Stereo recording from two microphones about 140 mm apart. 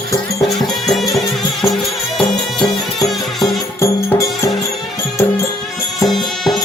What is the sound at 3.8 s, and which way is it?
Music, 20° left (ahead or behind).